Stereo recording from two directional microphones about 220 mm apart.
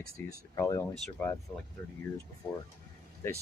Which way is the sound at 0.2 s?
10° left (ahead or behind).